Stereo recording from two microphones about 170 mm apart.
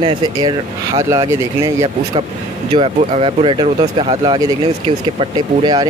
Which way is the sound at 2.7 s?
30° right (ahead or behind).